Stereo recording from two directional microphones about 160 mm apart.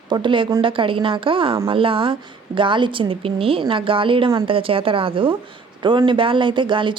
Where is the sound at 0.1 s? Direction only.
30° right (ahead or behind).